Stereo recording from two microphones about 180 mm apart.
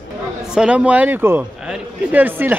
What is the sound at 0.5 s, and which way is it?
A man's voice, 5° right (ahead or behind).